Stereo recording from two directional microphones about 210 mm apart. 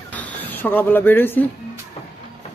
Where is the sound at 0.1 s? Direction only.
10° left (ahead or behind).